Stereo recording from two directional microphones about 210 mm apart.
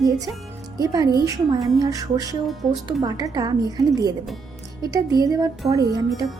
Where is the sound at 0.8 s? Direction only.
15° right (ahead or behind).